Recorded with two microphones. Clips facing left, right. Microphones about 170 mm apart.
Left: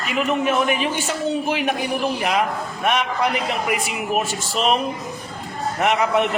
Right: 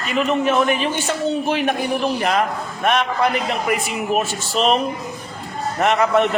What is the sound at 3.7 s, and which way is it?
A man's voice, 10° left (ahead or behind).